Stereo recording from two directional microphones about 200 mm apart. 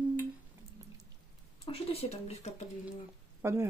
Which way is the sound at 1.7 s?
30° left (ahead or behind).